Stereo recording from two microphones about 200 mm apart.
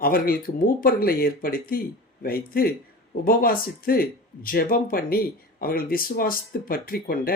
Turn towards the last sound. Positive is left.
turn(degrees=45)  # may be behind; listen again after turning